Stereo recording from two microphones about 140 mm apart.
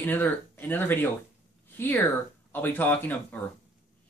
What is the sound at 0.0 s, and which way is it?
Speech, 15° left (ahead or behind).